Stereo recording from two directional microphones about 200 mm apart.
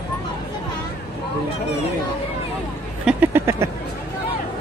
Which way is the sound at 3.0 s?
10° right (ahead or behind).